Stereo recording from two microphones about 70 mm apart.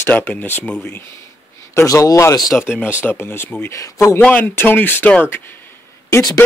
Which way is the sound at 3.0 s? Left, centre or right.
Left.